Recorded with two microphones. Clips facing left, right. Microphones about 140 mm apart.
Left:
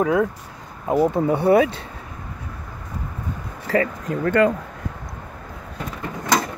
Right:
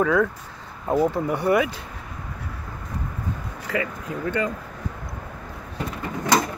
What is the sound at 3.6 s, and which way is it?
Speech, 35° left (ahead or behind).